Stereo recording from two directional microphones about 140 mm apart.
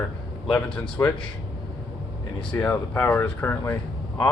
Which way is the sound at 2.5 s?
10° left (ahead or behind).